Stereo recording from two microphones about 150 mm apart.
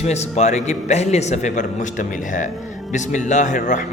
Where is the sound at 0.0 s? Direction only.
45° left (ahead or behind).